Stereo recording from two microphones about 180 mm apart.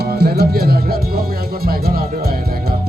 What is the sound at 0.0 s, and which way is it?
Music, 60° right (ahead or behind).